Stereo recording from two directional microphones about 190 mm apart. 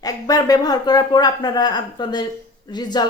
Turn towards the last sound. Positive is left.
turn(degrees=20)  # may be behind; listen again after turning